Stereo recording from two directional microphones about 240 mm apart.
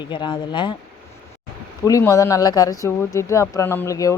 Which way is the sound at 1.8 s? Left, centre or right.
Centre.